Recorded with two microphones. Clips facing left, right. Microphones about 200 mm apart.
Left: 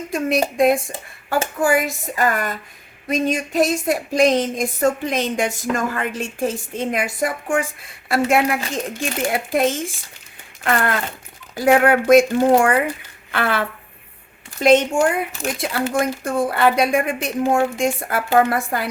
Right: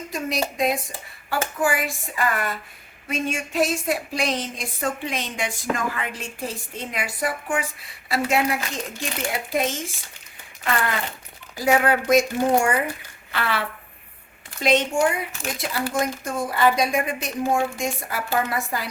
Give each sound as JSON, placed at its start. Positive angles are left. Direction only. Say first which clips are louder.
{"t": 0.1, "sound": "speech", "louder": "left 7 dB", "side_deg": 55}
{"t": 11.5, "sound": "a woman's voice", "louder": "left 5 dB", "side_deg": 60}